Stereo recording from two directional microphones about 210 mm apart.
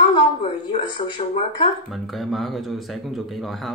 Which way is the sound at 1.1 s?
25° left (ahead or behind).